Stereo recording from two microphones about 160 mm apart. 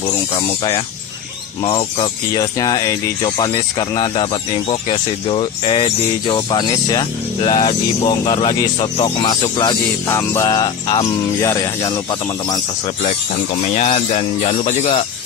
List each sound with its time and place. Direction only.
0.4 s speech: 30° left (ahead or behind)
2.3 s speech: 20° left (ahead or behind)
13.7 s speech: 45° left (ahead or behind)